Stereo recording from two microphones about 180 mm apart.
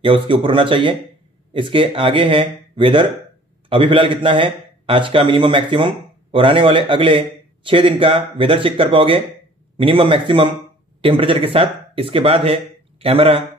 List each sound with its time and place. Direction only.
0.0 s a man's voice: 30° right (ahead or behind)